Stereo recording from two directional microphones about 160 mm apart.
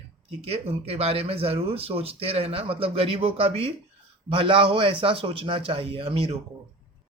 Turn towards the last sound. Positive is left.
turn(degrees=-35)  # may be behind; listen again after turning